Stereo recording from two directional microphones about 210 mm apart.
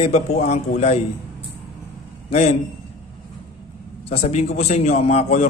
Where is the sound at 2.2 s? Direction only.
30° left (ahead or behind).